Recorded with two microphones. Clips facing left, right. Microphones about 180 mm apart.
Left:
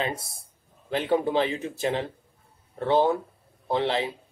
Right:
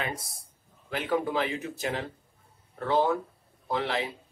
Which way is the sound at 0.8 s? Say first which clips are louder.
Left 4 dB; 25° left (ahead or behind).